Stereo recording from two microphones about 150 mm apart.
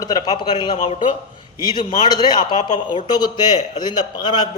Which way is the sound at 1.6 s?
30° left (ahead or behind).